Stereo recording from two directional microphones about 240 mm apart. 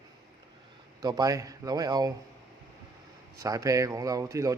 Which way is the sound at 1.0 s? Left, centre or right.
Centre.